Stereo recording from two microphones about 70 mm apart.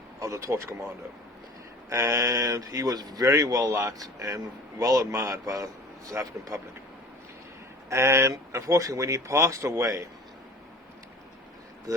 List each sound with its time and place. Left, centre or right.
0.2 s speech: right
1.9 s a man's voice: right
3.2 s a man's voice: right
7.9 s a man's voice: right
11.9 s speech: right